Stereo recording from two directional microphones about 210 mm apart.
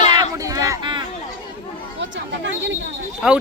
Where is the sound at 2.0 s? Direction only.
60° right (ahead or behind).